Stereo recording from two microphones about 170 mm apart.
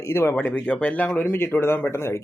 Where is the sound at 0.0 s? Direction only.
15° left (ahead or behind).